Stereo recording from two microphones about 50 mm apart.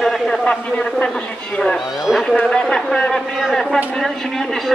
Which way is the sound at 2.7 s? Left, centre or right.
Centre.